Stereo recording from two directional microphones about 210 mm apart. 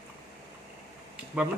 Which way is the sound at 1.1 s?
5° right (ahead or behind).